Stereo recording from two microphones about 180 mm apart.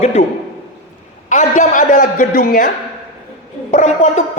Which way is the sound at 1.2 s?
45° left (ahead or behind).